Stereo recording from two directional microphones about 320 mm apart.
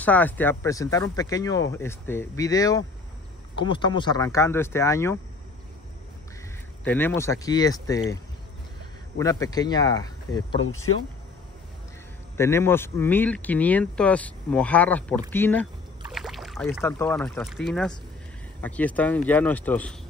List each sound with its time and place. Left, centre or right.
0.0 s speech: centre
6.8 s speech: centre
9.2 s speech: centre
10.6 s speech: left
12.4 s speech: centre